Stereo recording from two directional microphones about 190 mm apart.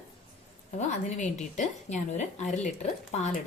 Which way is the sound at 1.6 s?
40° left (ahead or behind).